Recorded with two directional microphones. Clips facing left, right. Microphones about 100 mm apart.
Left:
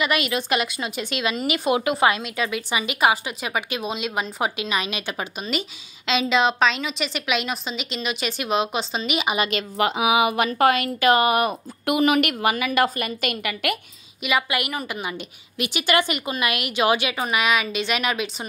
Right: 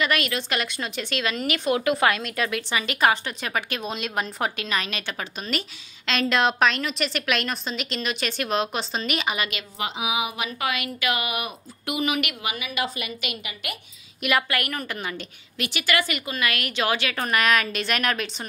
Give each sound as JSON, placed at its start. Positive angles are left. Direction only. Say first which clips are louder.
{"t": 0.0, "sound": "a woman's voice", "louder": "left 2 dB", "side_deg": 10}
{"t": 9.8, "sound": "speech", "louder": "left 8 dB", "side_deg": 60}
{"t": 13.5, "sound": "a woman's voice", "louder": "left 10 dB", "side_deg": 65}
{"t": 14.2, "sound": "a woman's voice", "louder": "left 1 dB", "side_deg": 0}